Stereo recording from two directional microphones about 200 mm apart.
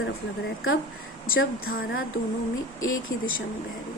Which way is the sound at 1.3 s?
90° left.